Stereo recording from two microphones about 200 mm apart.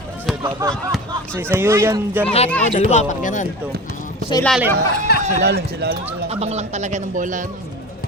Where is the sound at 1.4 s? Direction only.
10° right (ahead or behind).